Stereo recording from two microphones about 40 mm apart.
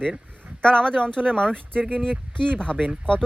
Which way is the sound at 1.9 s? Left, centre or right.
Right.